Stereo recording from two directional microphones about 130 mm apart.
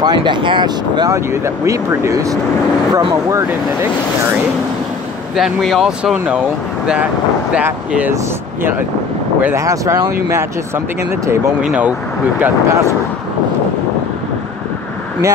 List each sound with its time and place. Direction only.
0.0 s speech: 35° right (ahead or behind)
2.9 s speech: 40° right (ahead or behind)
5.3 s speech: centre (ahead or behind)
7.5 s speech: 10° right (ahead or behind)
9.4 s speech: 20° right (ahead or behind)
11.6 s speech: 10° right (ahead or behind)